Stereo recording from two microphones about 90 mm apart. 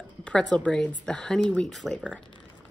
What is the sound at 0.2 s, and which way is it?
A woman's voice, 10° left (ahead or behind).